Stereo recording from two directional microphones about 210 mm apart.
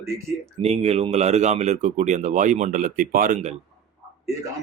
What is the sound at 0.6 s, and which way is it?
Speech, 30° right (ahead or behind).